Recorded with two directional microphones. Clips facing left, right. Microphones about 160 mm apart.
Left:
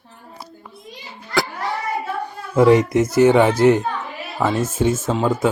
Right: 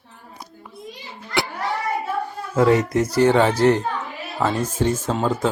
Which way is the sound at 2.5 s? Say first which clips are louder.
Left 4 dB; 20° left (ahead or behind).